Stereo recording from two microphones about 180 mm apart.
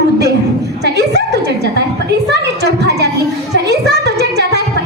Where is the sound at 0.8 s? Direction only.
65° right (ahead or behind).